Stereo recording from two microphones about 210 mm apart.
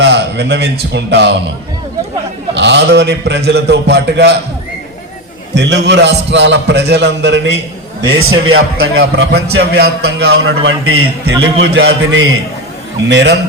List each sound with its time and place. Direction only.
0.0 s a man's voice: 55° right (ahead or behind)
2.6 s a man's voice: 55° right (ahead or behind)
5.5 s a man's voice: 55° right (ahead or behind)
8.2 s a man's voice: 80° right
9.0 s a man's voice: 50° right (ahead or behind)
10.7 s a man's voice: 90° right
11.4 s a man's voice: 60° right (ahead or behind)